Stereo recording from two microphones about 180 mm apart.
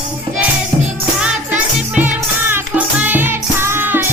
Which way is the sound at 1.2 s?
5° right (ahead or behind).